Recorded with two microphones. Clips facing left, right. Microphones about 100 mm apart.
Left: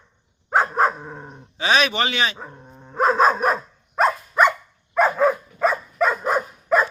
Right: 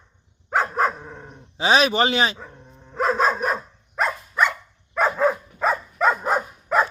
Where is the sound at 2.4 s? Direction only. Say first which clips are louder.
Left 3 dB; 35° left (ahead or behind).